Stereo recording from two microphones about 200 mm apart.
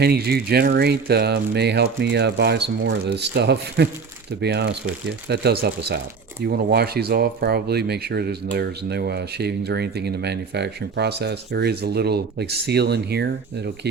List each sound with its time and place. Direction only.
0.0 s speech: 50° right (ahead or behind)